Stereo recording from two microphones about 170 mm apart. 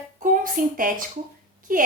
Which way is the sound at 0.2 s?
55° right (ahead or behind).